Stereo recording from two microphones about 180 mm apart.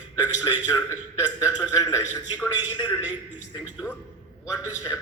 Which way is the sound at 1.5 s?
25° left (ahead or behind).